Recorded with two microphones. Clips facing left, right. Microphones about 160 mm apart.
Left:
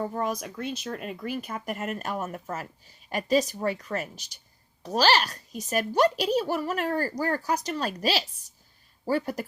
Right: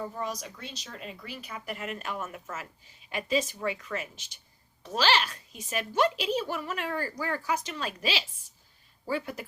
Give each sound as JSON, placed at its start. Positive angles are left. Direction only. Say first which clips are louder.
{"t": 0.0, "sound": "a woman's voice", "louder": "left 5 dB", "side_deg": 50}